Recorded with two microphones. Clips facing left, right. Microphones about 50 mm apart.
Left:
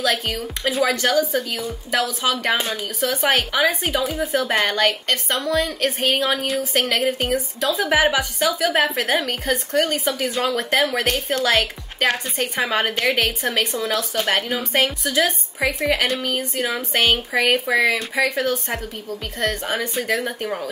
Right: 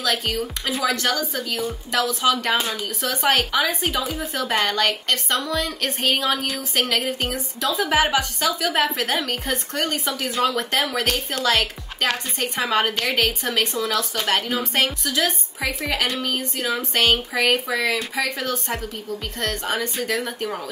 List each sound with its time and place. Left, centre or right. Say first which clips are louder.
0.0 s a woman's voice: left 1 dB; centre